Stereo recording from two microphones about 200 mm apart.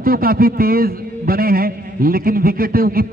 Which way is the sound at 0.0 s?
45° right (ahead or behind).